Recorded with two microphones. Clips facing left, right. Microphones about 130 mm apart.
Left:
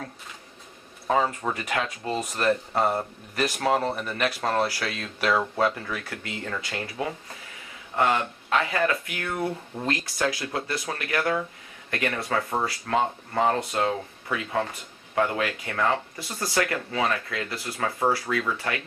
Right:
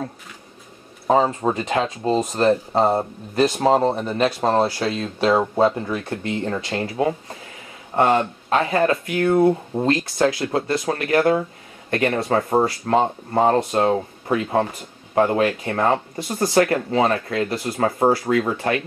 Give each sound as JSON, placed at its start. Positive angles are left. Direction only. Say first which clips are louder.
{"t": 1.0, "sound": "speech", "louder": "right 6 dB", "side_deg": -30}